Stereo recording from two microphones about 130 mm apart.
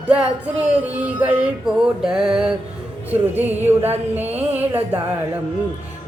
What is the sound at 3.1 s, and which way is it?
Music, 15° right (ahead or behind).